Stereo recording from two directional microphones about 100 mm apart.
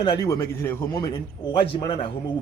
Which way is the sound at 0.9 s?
40° left (ahead or behind).